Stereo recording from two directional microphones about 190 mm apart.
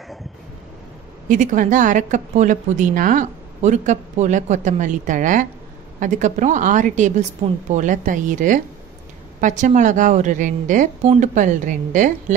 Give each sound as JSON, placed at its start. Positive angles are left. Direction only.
{"t": 1.3, "sound": "a woman's voice", "side_deg": -40}